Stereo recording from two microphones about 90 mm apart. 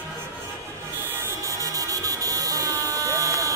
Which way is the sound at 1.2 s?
35° right (ahead or behind).